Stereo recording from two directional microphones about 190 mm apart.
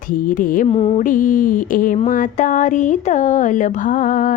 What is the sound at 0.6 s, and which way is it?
Music, 30° left (ahead or behind).